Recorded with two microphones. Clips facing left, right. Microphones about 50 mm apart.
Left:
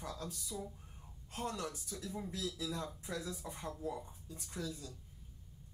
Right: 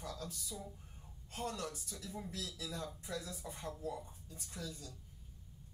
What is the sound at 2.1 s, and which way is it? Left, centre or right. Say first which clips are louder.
Speech: left 4 dB; centre.